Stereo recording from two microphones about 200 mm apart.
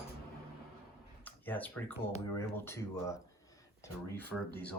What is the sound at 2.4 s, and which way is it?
Speech, 10° left (ahead or behind).